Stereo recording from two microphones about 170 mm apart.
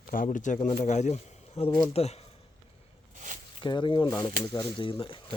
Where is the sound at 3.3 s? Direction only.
50° right (ahead or behind).